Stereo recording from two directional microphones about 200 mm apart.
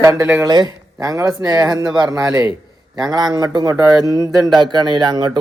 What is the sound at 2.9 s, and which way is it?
A man's voice, 20° right (ahead or behind).